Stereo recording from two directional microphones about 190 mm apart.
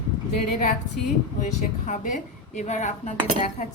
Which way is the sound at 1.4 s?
40° left (ahead or behind).